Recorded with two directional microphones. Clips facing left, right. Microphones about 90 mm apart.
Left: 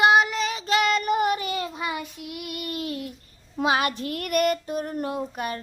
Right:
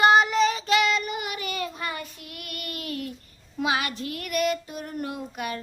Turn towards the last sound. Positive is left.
turn(degrees=35)  # may be behind; listen again after turning